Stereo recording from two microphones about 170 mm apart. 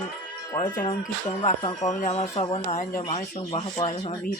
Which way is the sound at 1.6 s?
25° left (ahead or behind).